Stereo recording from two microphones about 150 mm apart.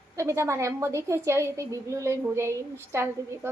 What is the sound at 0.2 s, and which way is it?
A woman's voice, 20° right (ahead or behind).